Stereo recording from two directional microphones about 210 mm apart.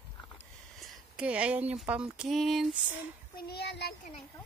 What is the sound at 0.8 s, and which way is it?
Speech, 5° right (ahead or behind).